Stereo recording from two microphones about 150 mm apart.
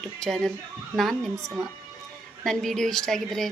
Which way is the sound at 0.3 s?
5° left (ahead or behind).